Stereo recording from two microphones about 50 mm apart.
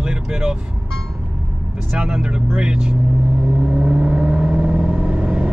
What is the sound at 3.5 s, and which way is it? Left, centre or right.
Vehicle, right.